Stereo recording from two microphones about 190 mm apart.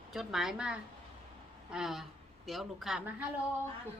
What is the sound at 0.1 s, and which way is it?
A woman's voice, centre (ahead or behind).